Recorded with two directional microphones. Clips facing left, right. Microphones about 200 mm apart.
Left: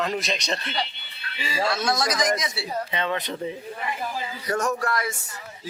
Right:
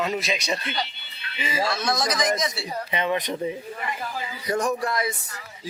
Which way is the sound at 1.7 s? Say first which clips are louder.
Left 1 dB; 5° left (ahead or behind).